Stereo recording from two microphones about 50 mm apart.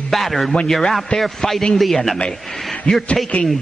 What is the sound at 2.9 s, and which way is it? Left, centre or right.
Speech, centre.